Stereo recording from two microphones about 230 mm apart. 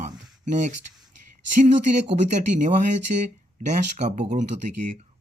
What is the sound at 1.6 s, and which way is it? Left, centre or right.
Speech, right.